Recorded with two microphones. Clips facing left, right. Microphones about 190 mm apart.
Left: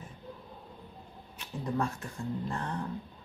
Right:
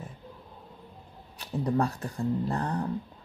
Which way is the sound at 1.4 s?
35° right (ahead or behind).